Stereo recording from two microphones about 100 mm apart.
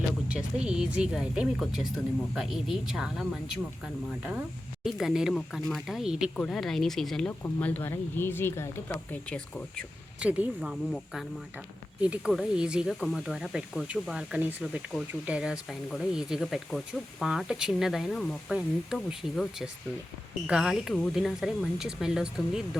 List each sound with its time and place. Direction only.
0.3 s speech: 10° right (ahead or behind)
4.8 s speech: 5° right (ahead or behind)
6.0 s speech: 10° right (ahead or behind)
6.3 s speech: 5° left (ahead or behind)
7.3 s speech: 15° left (ahead or behind)
9.3 s speech: 10° left (ahead or behind)
10.2 s speech: 15° right (ahead or behind)
12.0 s speech: 10° right (ahead or behind)